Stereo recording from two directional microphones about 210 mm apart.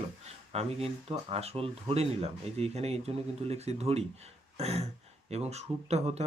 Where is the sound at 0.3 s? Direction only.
30° right (ahead or behind).